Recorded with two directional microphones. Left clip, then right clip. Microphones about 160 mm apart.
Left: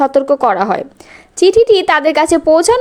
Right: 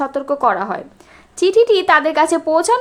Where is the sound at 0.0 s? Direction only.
35° left (ahead or behind).